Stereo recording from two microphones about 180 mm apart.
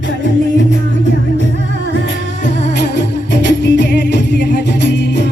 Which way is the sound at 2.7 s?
70° left (ahead or behind).